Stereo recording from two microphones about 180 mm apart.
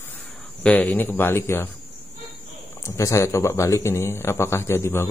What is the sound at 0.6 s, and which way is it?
Mantra, 5° left (ahead or behind).